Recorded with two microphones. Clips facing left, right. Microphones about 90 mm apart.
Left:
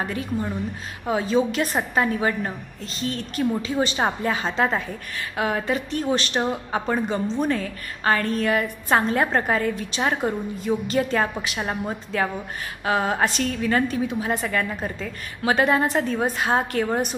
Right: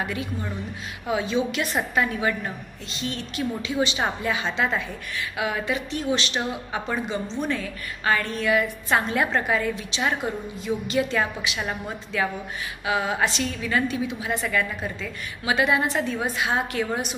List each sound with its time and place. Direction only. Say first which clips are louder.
0.0 s a woman's voice: left 3 dB; 40° left (ahead or behind)